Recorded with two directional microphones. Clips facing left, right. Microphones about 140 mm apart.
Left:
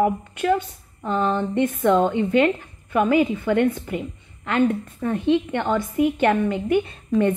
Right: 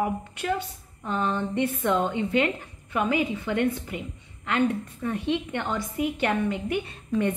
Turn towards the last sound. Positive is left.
turn(degrees=50)  # may be behind; listen again after turning